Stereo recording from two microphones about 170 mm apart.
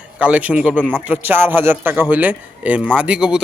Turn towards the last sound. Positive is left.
turn(degrees=-5)  # may be behind; listen again after turning